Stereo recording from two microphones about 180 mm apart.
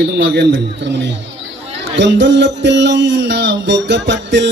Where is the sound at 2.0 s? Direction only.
80° right.